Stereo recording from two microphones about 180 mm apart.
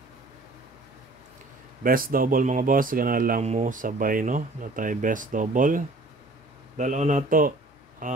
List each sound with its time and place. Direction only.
1.8 s speech: 50° right (ahead or behind)
3.4 s speech: 40° right (ahead or behind)